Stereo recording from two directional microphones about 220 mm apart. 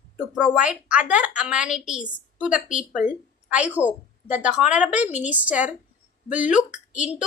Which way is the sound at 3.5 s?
5° right (ahead or behind).